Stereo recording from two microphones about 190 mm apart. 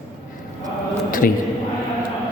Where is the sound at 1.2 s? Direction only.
50° left (ahead or behind).